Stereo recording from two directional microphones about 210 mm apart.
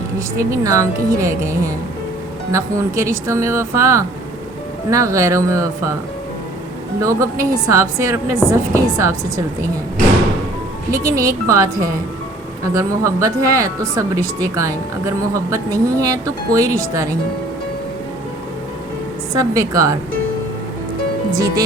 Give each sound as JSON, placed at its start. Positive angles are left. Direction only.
{"t": 0.3, "sound": "speech", "side_deg": -15}
{"t": 7.0, "sound": "speech", "side_deg": -15}
{"t": 10.9, "sound": "speech", "side_deg": -15}
{"t": 19.3, "sound": "speech", "side_deg": -15}